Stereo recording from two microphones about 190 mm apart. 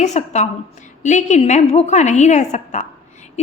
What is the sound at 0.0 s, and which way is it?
A woman's voice, 35° left (ahead or behind).